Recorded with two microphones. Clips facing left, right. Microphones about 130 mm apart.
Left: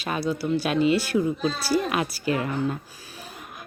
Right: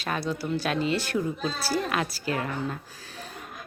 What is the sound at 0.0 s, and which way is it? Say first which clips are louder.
Speech: left 3 dB; 10° left (ahead or behind).